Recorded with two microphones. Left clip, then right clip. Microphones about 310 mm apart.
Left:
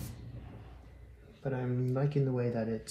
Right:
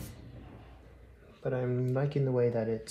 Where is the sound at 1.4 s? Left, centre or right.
Right.